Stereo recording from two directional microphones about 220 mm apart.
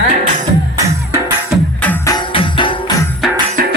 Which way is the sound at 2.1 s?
25° left (ahead or behind).